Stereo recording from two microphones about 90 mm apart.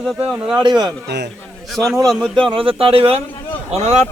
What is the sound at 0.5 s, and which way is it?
Speech, 50° right (ahead or behind).